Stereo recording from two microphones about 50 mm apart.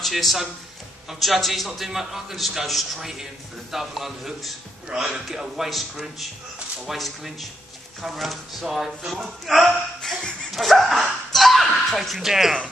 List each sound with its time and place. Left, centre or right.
0.0 s a man's voice: centre
10.5 s slap: centre
12.3 s speech: centre